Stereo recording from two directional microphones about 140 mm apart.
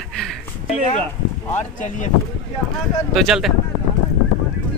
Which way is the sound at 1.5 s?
65° left (ahead or behind).